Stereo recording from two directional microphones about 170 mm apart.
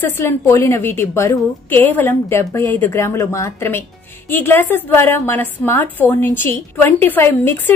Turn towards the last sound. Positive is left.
turn(degrees=10)  # may be behind; listen again after turning